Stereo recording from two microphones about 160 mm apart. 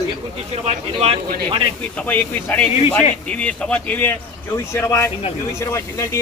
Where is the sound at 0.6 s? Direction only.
40° right (ahead or behind).